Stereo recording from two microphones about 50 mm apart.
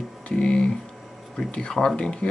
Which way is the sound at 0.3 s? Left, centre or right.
Centre.